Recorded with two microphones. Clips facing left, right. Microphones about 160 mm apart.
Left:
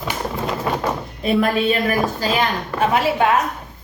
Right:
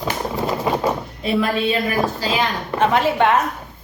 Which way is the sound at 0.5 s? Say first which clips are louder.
Right 2 dB; 15° right (ahead or behind).